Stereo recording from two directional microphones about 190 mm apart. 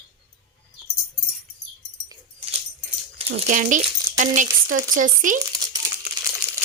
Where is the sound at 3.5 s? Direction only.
40° right (ahead or behind).